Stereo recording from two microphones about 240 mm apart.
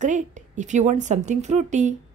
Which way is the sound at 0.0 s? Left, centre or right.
Right.